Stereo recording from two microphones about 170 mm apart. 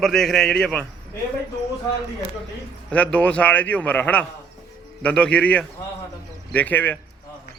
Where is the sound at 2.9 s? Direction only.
5° left (ahead or behind).